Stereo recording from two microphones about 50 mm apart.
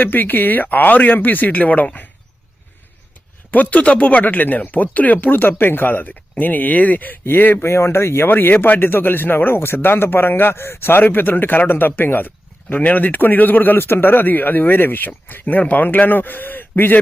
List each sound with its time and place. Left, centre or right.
0.0 s speech: left
3.5 s speech: left
7.6 s speech: left
8.3 s speech: left